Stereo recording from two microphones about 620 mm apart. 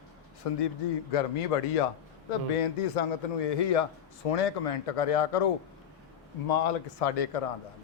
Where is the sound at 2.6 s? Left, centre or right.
Left.